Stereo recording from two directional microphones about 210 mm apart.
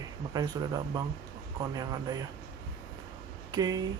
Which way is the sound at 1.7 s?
15° right (ahead or behind).